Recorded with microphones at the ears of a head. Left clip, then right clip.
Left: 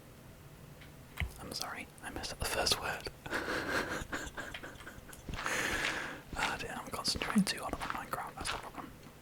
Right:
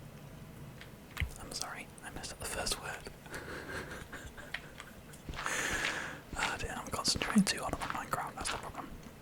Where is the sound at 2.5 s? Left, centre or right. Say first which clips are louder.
Left 5 dB; left.